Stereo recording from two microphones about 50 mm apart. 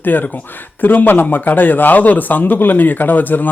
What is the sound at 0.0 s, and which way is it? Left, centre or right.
Speech, left.